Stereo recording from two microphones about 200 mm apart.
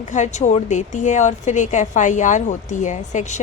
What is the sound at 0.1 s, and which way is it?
A woman's voice, 35° left (ahead or behind).